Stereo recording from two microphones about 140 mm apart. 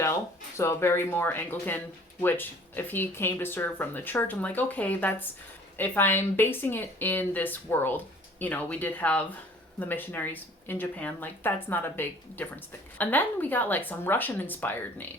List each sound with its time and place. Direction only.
0.0 s speech: 20° left (ahead or behind)